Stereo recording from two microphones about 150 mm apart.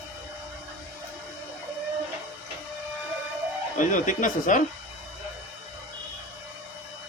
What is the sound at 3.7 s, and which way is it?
Speech, 60° left (ahead or behind).